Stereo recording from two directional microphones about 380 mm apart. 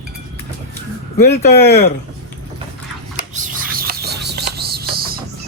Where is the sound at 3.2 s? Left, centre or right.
Centre.